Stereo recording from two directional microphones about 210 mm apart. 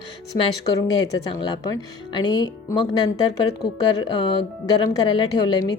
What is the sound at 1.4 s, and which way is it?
A woman's voice, 20° left (ahead or behind).